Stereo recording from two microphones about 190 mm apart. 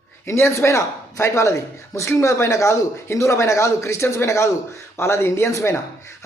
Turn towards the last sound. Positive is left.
turn(degrees=15)  # may be behind; listen again after turning